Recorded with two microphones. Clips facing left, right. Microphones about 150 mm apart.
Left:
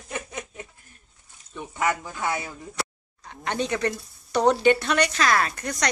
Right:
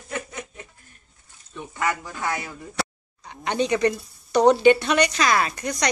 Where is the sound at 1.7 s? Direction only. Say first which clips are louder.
Left 1 dB; 15° left (ahead or behind).